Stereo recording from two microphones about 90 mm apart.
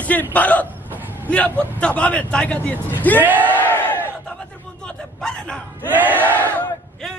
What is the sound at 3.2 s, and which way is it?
Speech, 20° right (ahead or behind).